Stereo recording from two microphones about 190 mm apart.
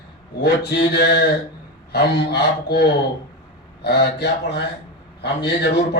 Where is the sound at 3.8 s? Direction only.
60° left (ahead or behind).